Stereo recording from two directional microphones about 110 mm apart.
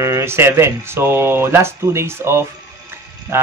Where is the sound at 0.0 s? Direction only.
25° right (ahead or behind).